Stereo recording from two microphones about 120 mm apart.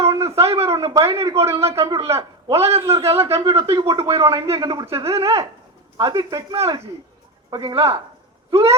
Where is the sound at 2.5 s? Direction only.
55° right (ahead or behind).